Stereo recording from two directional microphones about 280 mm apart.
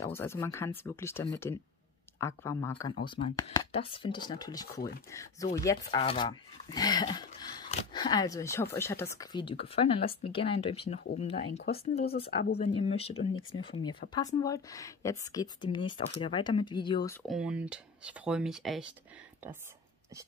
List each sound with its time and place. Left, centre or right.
0.0 s speech: centre
12.3 s speech: left
12.5 s speech: left
13.3 s speech: left
13.6 s speech: centre
17.3 s speech: centre